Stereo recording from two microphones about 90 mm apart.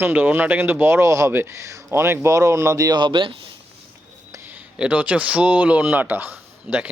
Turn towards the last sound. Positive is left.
turn(degrees=-20)  # may be behind; listen again after turning